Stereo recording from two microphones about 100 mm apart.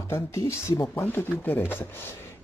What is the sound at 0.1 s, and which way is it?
Speech, 30° left (ahead or behind).